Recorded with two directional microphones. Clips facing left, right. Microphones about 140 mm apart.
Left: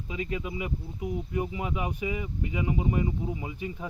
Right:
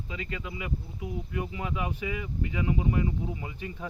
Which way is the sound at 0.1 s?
20° left (ahead or behind).